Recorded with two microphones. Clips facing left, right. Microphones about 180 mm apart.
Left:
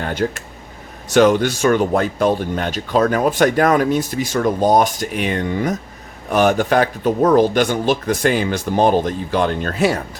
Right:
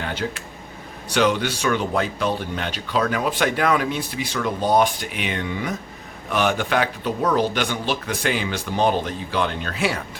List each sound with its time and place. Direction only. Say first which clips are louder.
0.0 s speech: left 6 dB; 45° left (ahead or behind)